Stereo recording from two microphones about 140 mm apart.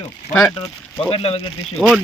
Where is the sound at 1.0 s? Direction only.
45° left (ahead or behind).